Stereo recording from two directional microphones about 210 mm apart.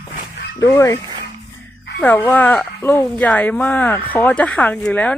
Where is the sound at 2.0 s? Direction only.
10° left (ahead or behind).